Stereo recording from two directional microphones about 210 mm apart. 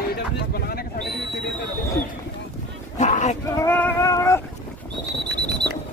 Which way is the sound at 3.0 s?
35° left (ahead or behind).